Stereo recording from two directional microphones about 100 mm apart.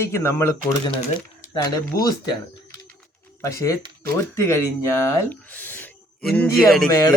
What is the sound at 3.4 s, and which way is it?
A man's voice, 30° left (ahead or behind).